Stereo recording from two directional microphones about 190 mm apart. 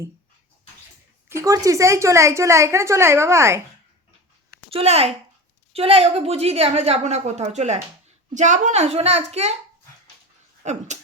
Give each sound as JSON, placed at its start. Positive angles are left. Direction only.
{"t": 1.3, "sound": "a woman's voice", "side_deg": -15}
{"t": 4.7, "sound": "a woman's voice", "side_deg": -30}
{"t": 10.6, "sound": "speech", "side_deg": -40}